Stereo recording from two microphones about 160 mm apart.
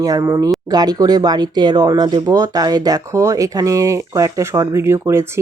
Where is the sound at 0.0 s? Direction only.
20° right (ahead or behind).